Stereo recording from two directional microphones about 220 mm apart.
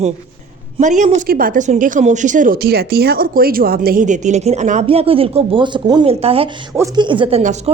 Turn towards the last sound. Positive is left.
turn(degrees=-30)  # may be behind; listen again after turning